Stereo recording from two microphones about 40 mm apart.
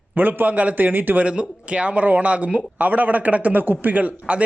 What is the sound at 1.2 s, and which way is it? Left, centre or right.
Speech, right.